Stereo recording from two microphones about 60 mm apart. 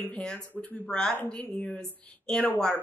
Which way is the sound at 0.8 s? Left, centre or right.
Centre.